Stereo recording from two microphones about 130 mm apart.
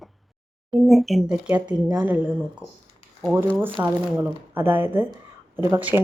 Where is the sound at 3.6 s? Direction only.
15° right (ahead or behind).